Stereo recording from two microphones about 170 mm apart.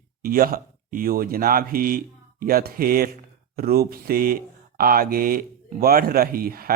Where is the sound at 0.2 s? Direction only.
60° right (ahead or behind).